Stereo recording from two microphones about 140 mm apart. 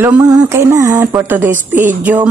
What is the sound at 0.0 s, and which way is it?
Speech, 20° right (ahead or behind).